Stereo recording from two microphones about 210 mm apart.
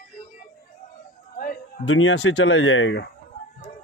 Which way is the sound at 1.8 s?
70° left (ahead or behind).